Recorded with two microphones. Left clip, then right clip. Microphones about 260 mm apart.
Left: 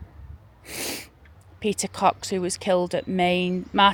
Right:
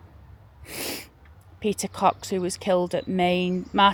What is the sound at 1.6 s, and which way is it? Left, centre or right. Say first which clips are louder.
Speech: left 1 dB; centre.